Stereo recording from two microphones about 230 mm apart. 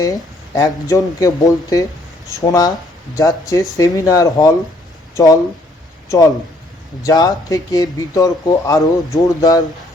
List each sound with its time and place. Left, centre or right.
0.0 s speech: centre